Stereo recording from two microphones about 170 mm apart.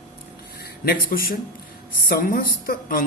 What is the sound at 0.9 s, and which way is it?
A man's voice, 60° left (ahead or behind).